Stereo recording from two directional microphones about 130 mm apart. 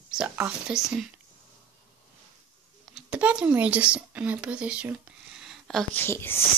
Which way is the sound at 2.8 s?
5° right (ahead or behind).